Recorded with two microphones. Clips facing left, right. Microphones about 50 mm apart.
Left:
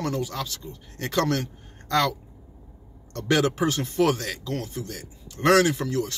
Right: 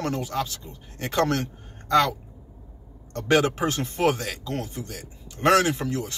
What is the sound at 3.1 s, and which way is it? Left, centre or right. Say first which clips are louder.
Speech: right 2 dB; right.